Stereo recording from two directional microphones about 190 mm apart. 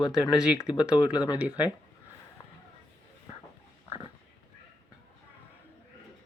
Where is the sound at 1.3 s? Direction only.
10° right (ahead or behind).